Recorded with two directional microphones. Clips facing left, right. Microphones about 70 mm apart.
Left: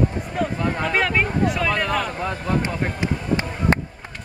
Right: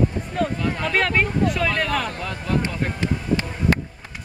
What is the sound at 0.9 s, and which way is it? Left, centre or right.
Speech, centre.